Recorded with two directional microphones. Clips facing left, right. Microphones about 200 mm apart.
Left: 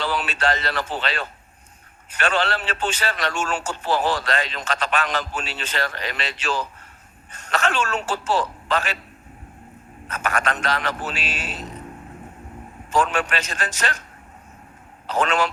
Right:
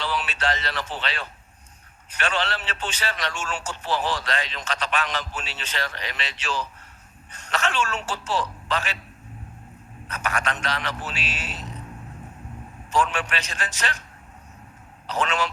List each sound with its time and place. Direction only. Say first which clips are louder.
0.0 s a man's voice: left 3 dB; 45° left (ahead or behind)
10.1 s a man's voice: left 3 dB; 45° left (ahead or behind)
12.9 s a man's voice: left 3 dB; 45° left (ahead or behind)
15.0 s a man's voice: left 4 dB; 45° left (ahead or behind)